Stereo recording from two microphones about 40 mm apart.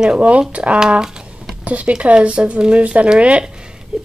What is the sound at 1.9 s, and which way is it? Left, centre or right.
Speech, right.